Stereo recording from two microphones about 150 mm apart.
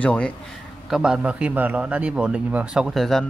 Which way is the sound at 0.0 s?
5° left (ahead or behind).